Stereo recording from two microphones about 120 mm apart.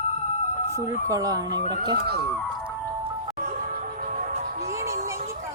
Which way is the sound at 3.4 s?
90° right.